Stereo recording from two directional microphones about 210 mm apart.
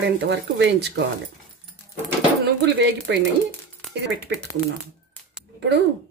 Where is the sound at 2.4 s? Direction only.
55° right (ahead or behind).